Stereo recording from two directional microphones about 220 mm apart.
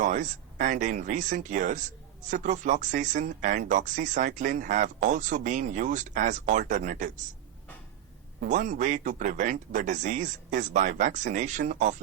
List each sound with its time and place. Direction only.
0.0 s speech: 35° right (ahead or behind)
8.4 s speech: 35° right (ahead or behind)